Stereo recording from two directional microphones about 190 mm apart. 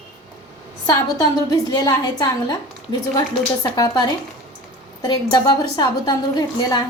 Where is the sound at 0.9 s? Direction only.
20° left (ahead or behind).